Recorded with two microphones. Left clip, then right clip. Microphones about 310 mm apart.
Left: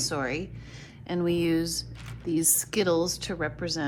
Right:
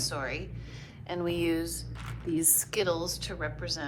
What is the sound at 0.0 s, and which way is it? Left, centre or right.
A woman's voice, left.